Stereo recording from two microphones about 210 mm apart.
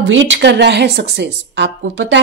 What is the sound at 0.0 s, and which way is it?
Speech, 65° right (ahead or behind).